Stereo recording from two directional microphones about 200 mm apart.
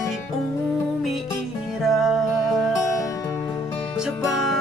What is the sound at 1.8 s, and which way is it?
Music, centre (ahead or behind).